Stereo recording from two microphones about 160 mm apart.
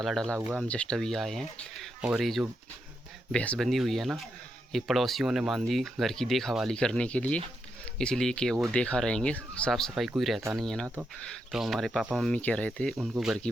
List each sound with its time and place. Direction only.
0.0 s speech: 5° left (ahead or behind)
0.3 s speech: 10° right (ahead or behind)
0.6 s speech: 5° left (ahead or behind)